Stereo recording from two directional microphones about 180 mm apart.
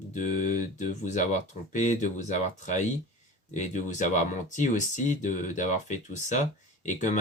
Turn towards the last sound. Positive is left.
turn(degrees=40)  # may be behind; listen again after turning